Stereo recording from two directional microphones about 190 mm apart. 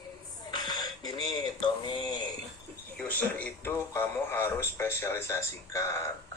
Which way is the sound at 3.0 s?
10° left (ahead or behind).